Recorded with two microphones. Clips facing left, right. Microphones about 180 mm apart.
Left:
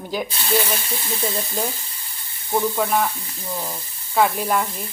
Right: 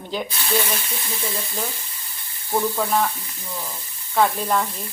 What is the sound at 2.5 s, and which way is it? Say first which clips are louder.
Speech: left 1 dB; centre (ahead or behind).